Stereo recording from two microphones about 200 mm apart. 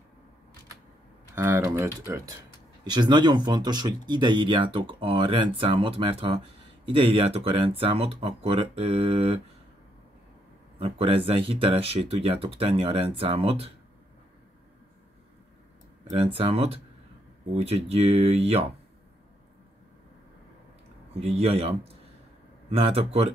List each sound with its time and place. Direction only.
1.3 s speech: 10° right (ahead or behind); by 9.4 s 30° right (ahead or behind)
10.8 s speech: 30° right (ahead or behind)
16.1 s speech: 30° right (ahead or behind)
21.2 s speech: 30° right (ahead or behind)